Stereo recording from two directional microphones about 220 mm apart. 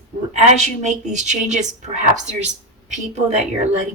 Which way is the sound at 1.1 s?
35° right (ahead or behind).